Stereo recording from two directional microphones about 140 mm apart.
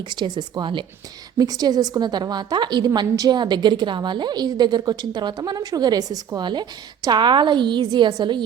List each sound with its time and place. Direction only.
0.0 s a woman's voice: 35° right (ahead or behind)